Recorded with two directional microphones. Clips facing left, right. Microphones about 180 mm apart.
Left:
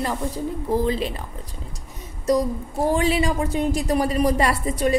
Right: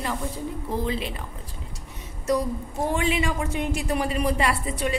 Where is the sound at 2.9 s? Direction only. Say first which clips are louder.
Left 4 dB; 35° left (ahead or behind).